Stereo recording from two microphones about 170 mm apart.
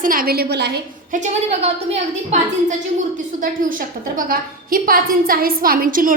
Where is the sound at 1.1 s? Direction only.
45° right (ahead or behind).